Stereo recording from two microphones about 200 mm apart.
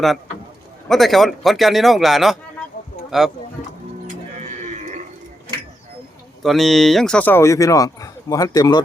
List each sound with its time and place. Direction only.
0.9 s a man's voice: centre (ahead or behind)
4.4 s a sound: 35° right (ahead or behind)
6.4 s speech: centre (ahead or behind); by 8.8 s 20° left (ahead or behind)